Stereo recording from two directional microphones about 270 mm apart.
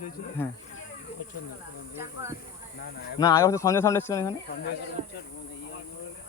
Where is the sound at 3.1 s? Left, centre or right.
Centre.